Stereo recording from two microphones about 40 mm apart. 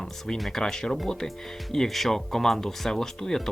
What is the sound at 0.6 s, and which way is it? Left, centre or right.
Speech, centre.